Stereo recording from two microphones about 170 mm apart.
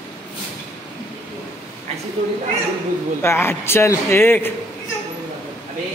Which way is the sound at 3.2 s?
15° left (ahead or behind).